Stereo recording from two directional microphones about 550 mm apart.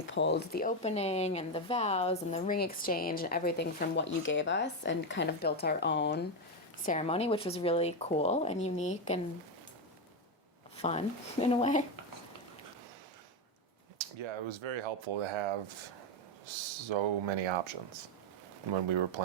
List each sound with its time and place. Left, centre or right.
0.0 s speech: centre
10.8 s speech: centre
14.2 s speech: right
16.9 s speech: right
18.7 s speech: right